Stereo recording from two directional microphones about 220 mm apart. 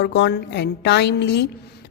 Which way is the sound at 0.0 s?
50° left (ahead or behind).